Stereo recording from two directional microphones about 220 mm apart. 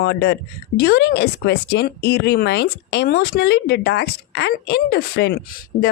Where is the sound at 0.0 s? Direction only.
50° left (ahead or behind).